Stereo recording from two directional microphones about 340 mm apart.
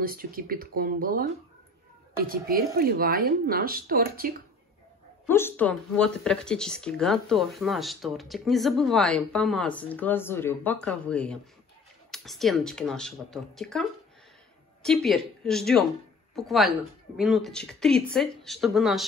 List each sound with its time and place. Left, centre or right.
0.0 s speech: right
2.2 s speech: right
5.3 s speech: centre